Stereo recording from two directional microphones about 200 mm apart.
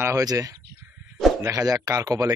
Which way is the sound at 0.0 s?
15° right (ahead or behind).